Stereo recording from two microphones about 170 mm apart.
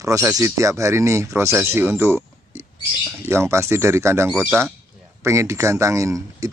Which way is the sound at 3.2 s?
15° right (ahead or behind).